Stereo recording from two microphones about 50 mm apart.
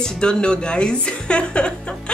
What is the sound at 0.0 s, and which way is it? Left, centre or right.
A woman's voice, centre.